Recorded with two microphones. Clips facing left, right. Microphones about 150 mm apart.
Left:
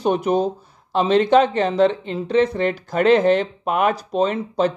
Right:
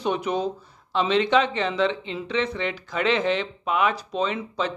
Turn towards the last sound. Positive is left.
turn(degrees=45)  # may be behind; listen again after turning